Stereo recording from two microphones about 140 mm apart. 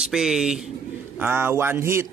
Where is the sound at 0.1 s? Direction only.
5° right (ahead or behind).